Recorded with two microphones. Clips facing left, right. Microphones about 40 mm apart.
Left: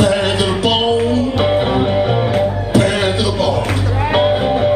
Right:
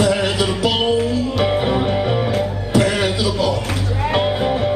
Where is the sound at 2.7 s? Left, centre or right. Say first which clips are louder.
Left 2 dB; left.